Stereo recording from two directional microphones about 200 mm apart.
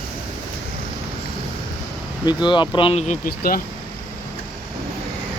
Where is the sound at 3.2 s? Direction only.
45° left (ahead or behind).